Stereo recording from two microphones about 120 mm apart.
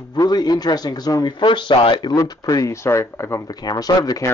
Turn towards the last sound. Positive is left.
turn(degrees=30)  # may be behind; listen again after turning